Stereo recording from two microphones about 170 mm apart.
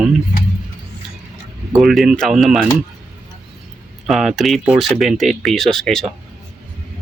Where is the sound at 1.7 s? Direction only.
Centre (ahead or behind).